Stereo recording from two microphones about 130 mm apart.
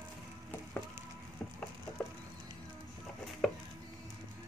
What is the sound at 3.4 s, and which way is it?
Chopping, centre (ahead or behind).